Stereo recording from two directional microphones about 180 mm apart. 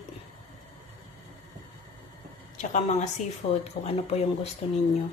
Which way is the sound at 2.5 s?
45° left (ahead or behind).